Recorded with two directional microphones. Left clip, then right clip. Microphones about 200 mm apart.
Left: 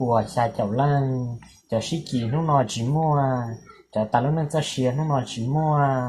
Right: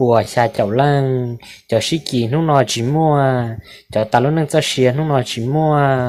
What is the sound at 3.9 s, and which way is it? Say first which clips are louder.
Speech: right 8 dB; 35° right (ahead or behind).